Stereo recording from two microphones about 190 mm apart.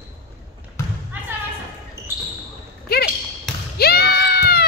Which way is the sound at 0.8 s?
15° left (ahead or behind).